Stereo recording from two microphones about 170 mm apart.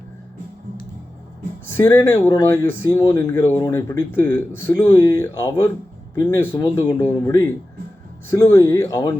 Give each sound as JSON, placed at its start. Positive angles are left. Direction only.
{"t": 1.7, "sound": "speech", "side_deg": 15}
{"t": 4.9, "sound": "speech", "side_deg": 25}